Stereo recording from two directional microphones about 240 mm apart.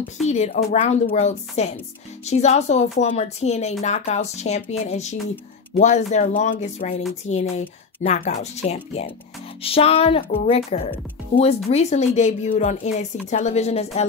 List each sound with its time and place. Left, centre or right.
0.3 s speech: left